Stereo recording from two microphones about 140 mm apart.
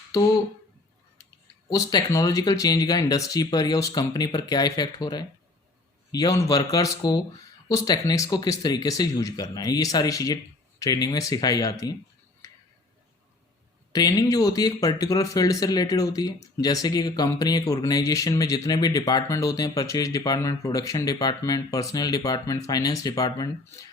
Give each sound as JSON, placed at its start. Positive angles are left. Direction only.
{"t": 1.7, "sound": "speech", "side_deg": 25}
{"t": 13.9, "sound": "speech", "side_deg": 25}